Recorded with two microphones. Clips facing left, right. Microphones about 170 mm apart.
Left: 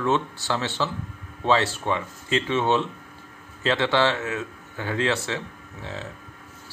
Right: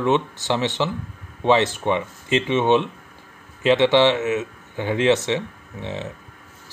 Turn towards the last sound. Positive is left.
turn(degrees=-20)  # may be behind; listen again after turning